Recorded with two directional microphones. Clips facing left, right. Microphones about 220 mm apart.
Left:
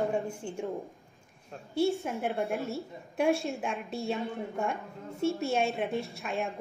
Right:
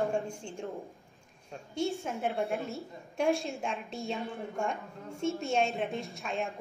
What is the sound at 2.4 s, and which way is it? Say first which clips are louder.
A woman's voice: left 1 dB; centre (ahead or behind).